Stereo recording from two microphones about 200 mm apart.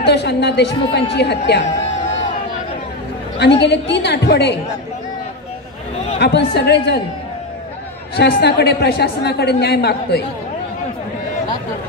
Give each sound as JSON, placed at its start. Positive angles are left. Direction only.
{"t": 0.0, "sound": "a woman's voice", "side_deg": 55}
{"t": 3.3, "sound": "a woman's voice", "side_deg": 60}
{"t": 6.1, "sound": "a woman's voice", "side_deg": 60}
{"t": 8.2, "sound": "a woman's voice", "side_deg": 55}